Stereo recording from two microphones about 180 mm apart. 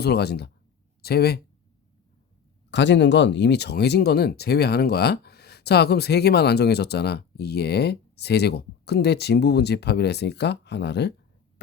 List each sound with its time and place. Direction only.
0.0 s speech: 65° left (ahead or behind)
2.6 s speech: 80° left